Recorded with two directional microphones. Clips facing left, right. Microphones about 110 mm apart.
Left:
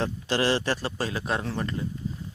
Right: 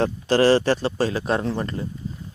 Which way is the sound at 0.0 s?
40° right (ahead or behind).